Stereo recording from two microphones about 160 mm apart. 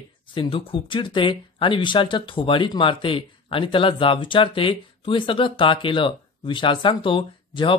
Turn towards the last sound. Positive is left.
turn(degrees=30)  # may be behind; listen again after turning